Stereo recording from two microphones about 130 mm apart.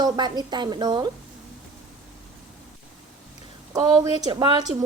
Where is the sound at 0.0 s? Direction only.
35° right (ahead or behind).